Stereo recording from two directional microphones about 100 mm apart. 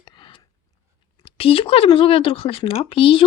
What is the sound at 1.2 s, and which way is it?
A woman's voice, 70° left (ahead or behind).